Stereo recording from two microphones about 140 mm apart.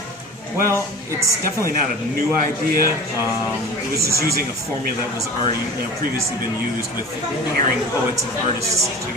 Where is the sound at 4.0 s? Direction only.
20° right (ahead or behind).